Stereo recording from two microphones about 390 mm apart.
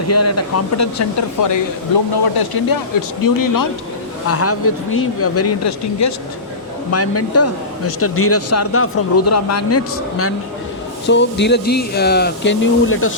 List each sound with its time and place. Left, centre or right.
0.1 s speech: left
2.4 s speech: left
3.2 s speech: left
4.3 s a man's voice: left